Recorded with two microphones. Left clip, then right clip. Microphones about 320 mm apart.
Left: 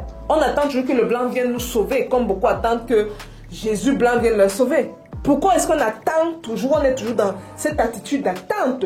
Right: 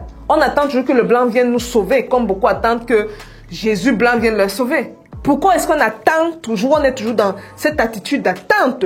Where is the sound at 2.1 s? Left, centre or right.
Right.